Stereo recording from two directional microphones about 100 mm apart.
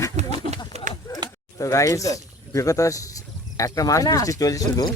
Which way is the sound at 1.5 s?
35° left (ahead or behind).